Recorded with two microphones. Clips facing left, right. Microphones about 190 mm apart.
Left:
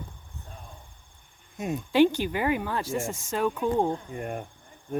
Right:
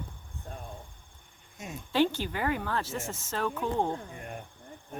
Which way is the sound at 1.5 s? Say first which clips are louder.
Left 11 dB; 60° left (ahead or behind).